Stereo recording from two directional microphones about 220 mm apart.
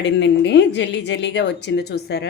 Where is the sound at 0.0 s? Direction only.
55° left (ahead or behind).